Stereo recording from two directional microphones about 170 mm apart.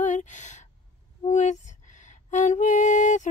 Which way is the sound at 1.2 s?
45° left (ahead or behind).